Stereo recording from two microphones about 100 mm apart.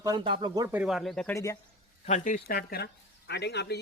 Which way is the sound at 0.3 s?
60° right (ahead or behind).